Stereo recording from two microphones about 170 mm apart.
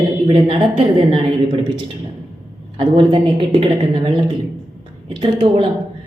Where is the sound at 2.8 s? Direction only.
30° right (ahead or behind).